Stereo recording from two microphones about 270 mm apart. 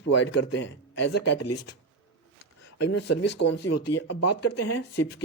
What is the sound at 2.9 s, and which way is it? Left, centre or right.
Speech, left.